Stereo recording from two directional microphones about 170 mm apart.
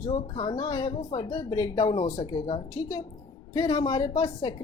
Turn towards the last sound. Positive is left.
turn(degrees=30)  # may be behind; listen again after turning